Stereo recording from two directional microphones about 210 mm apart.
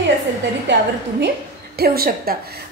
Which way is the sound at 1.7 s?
45° right (ahead or behind).